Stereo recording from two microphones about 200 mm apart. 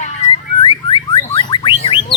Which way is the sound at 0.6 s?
25° left (ahead or behind).